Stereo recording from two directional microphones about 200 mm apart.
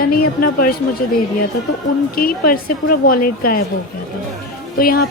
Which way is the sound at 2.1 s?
45° left (ahead or behind).